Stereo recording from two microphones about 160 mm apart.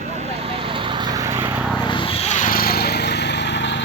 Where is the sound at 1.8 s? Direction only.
30° left (ahead or behind); by 3.8 s 90° left.